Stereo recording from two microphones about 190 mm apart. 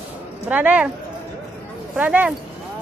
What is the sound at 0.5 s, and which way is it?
Speech, 10° right (ahead or behind).